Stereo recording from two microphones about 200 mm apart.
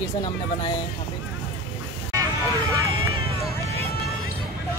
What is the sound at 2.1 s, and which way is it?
Hubbub, 15° right (ahead or behind).